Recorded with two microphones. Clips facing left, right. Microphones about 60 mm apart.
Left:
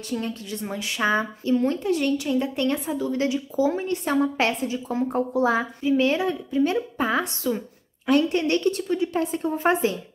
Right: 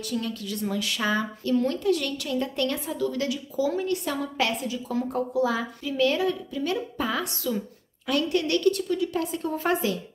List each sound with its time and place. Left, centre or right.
0.1 s a woman's voice: left